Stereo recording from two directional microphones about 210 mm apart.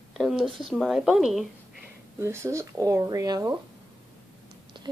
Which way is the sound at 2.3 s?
15° right (ahead or behind).